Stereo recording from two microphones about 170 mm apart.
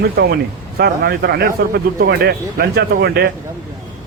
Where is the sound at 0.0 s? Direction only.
70° right (ahead or behind).